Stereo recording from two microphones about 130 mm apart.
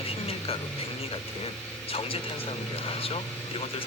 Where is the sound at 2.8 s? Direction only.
45° left (ahead or behind).